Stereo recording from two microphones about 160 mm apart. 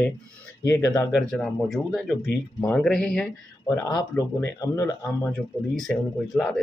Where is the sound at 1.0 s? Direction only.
Centre (ahead or behind).